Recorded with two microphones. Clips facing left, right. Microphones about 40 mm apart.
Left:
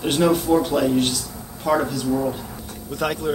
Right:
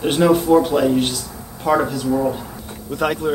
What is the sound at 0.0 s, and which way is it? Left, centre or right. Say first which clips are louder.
Speech: right 3 dB; centre.